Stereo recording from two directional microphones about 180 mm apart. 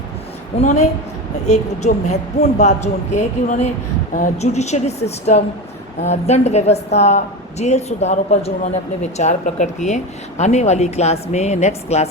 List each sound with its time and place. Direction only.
0.6 s speech: 40° left (ahead or behind)